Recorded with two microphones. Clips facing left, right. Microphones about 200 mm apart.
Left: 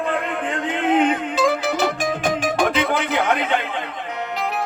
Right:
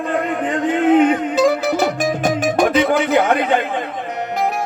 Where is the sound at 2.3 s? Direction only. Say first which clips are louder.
Right 4 dB; 60° left (ahead or behind).